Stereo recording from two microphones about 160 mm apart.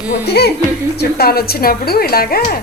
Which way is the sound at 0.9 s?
75° left (ahead or behind).